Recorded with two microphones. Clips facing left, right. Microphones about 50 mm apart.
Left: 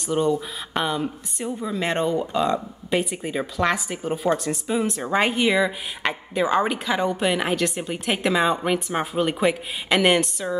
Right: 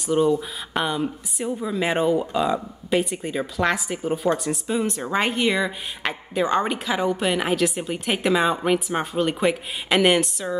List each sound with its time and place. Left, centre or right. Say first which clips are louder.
0.0 s speech: right 2 dB; centre